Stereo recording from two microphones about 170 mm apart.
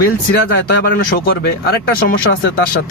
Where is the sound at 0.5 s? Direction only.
55° left (ahead or behind); by 2.5 s 75° left (ahead or behind).